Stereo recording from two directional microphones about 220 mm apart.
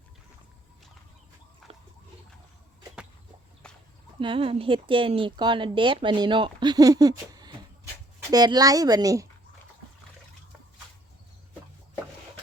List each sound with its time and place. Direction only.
1.7 s pig: 25° right (ahead or behind)
3.6 s a sound: 5° left (ahead or behind)
4.2 s speech: 25° right (ahead or behind)